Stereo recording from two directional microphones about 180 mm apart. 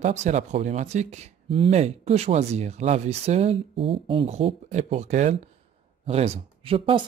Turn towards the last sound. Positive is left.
turn(degrees=-30)  # may be behind; listen again after turning